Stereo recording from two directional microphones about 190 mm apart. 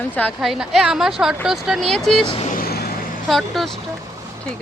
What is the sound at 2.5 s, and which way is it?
Vehicle, 50° left (ahead or behind).